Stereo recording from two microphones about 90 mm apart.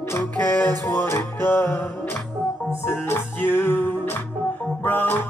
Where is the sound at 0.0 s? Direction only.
25° left (ahead or behind).